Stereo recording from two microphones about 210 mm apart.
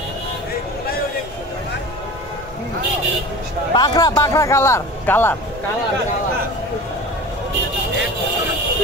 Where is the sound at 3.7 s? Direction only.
20° left (ahead or behind).